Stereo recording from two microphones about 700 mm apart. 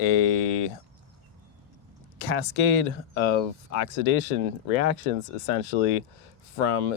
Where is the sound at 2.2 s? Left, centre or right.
Left.